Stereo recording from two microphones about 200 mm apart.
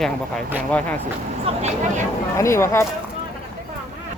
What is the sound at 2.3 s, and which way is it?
Speech, 15° left (ahead or behind).